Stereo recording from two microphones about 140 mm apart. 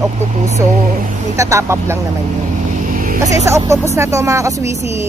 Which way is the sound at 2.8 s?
75° right (ahead or behind).